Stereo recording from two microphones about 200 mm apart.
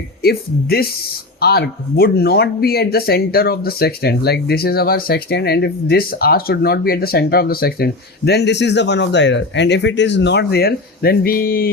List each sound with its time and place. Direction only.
0.2 s speech: 50° left (ahead or behind)